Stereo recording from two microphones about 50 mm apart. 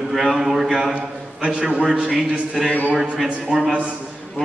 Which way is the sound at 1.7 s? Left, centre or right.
Right.